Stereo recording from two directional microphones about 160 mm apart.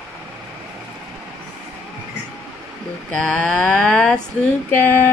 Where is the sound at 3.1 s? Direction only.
5° left (ahead or behind).